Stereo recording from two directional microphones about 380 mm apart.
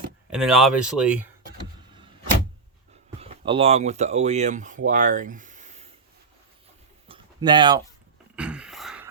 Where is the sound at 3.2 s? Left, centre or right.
Centre.